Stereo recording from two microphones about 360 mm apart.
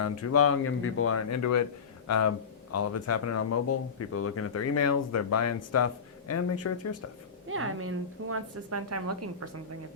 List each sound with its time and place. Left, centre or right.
0.0 s speech: left
7.4 s a woman's voice: right